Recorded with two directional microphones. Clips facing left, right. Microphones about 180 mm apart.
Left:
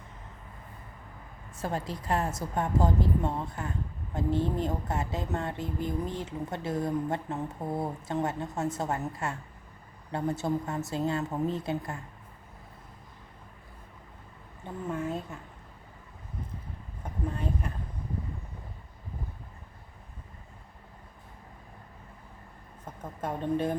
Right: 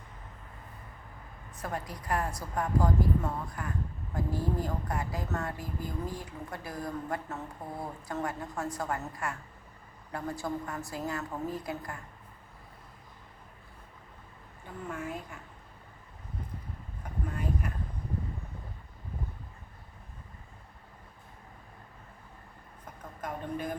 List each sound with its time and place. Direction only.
1.5 s a woman's voice: 25° left (ahead or behind)
14.8 s a woman's voice: 25° left (ahead or behind)
17.0 s vehicle: 30° left (ahead or behind)
23.2 s speech: 30° left (ahead or behind)